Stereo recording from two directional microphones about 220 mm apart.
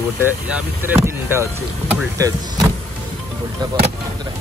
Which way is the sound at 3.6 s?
25° right (ahead or behind).